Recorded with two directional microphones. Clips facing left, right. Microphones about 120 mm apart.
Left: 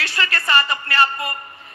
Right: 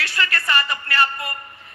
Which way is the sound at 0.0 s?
25° left (ahead or behind).